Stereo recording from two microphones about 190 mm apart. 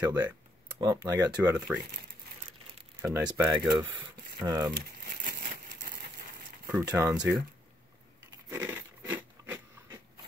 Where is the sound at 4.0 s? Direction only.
20° right (ahead or behind).